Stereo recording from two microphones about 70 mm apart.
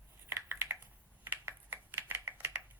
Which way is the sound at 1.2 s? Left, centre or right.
Right.